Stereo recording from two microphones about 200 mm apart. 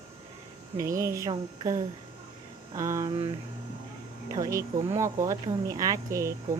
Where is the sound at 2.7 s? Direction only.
15° right (ahead or behind).